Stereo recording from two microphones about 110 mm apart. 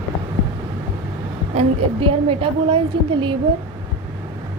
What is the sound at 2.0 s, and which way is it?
A woman's voice, 60° right (ahead or behind).